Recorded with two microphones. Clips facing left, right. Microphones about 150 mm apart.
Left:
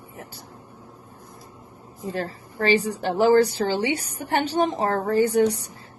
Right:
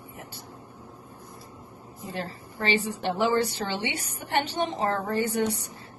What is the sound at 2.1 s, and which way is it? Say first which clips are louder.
A woman's voice: left 4 dB; 40° left (ahead or behind).